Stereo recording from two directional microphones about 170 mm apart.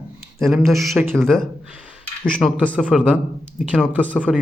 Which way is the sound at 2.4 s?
Centre (ahead or behind).